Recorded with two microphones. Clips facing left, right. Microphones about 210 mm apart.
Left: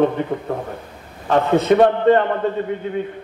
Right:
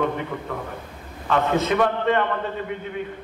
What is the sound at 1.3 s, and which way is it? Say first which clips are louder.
Speech: left 6 dB; 35° left (ahead or behind).